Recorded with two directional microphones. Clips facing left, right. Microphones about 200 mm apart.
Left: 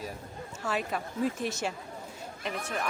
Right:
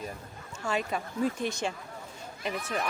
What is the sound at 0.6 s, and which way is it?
A woman's voice, 5° left (ahead or behind).